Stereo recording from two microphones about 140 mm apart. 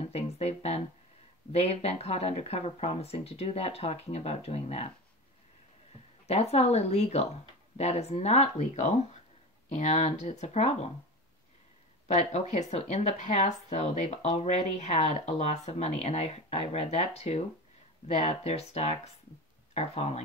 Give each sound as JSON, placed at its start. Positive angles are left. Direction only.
{"t": 0.1, "sound": "a sound", "side_deg": 50}
{"t": 1.5, "sound": "speech", "side_deg": 45}
{"t": 6.2, "sound": "speech", "side_deg": 50}
{"t": 12.1, "sound": "speech", "side_deg": 55}